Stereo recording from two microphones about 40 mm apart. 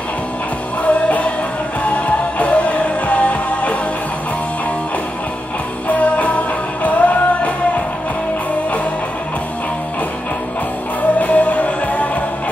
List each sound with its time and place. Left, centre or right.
0.8 s music: left
5.9 s music: left
11.1 s music: left